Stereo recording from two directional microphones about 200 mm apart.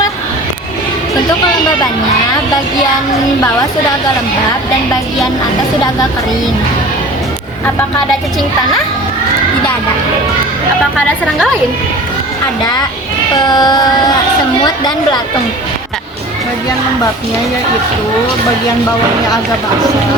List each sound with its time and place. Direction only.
13.4 s a woman's voice: 20° left (ahead or behind)